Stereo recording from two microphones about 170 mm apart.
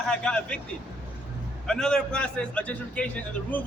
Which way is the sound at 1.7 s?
5° left (ahead or behind).